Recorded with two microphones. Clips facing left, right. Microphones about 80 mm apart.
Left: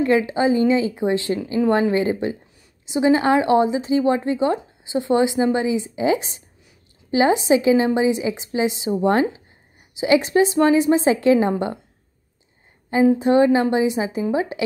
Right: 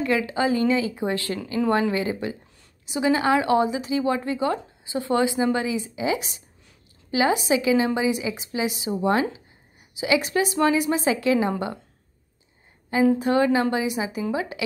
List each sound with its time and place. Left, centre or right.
0.0 s a woman's voice: left
13.2 s a woman's voice: left